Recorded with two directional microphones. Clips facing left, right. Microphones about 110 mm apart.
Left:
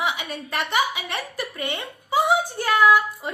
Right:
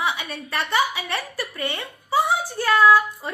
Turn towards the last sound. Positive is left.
turn(degrees=15)  # may be behind; listen again after turning